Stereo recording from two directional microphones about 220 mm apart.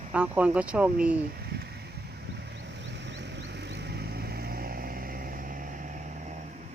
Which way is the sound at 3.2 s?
50° right (ahead or behind).